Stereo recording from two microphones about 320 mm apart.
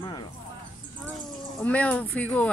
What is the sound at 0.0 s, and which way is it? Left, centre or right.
Music, centre.